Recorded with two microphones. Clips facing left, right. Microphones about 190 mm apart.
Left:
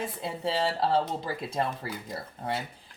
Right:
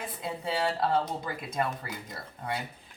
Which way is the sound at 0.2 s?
30° left (ahead or behind).